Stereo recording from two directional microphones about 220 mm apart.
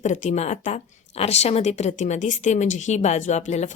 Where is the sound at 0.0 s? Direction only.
35° left (ahead or behind).